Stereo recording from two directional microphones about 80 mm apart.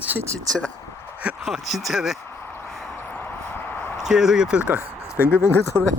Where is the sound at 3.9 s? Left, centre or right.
Centre.